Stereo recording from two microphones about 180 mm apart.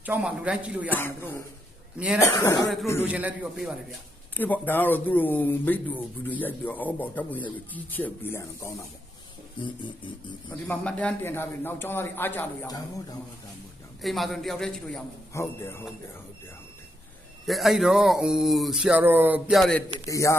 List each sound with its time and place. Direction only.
0.0 s a man's voice: 10° right (ahead or behind)
0.9 s speech: 10° left (ahead or behind)
3.1 s a man's voice: 10° right (ahead or behind)
4.4 s speech: 10° left (ahead or behind)
9.6 s speech: 25° left (ahead or behind)
10.7 s speech: 5° left (ahead or behind)
12.6 s speech: 20° left (ahead or behind)
14.0 s speech: centre (ahead or behind)
15.3 s speech: 15° left (ahead or behind)
17.4 s speech: centre (ahead or behind)
20.1 s speech: 15° left (ahead or behind)